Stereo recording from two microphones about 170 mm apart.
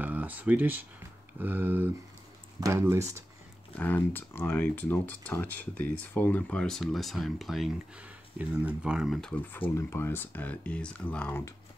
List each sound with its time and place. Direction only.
0.0 s speech: 10° right (ahead or behind)
3.7 s speech: 10° left (ahead or behind)
9.5 s speech: 15° left (ahead or behind)